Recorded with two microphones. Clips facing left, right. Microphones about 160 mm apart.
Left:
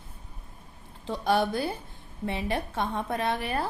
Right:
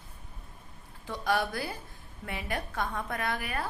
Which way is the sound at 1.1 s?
25° left (ahead or behind).